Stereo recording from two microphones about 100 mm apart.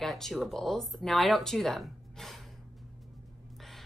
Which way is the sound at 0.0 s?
Centre (ahead or behind).